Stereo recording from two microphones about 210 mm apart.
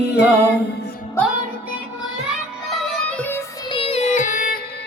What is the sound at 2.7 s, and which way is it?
Music, centre (ahead or behind).